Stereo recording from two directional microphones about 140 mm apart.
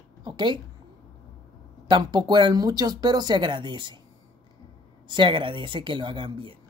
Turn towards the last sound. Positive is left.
turn(degrees=-35)  # may be behind; listen again after turning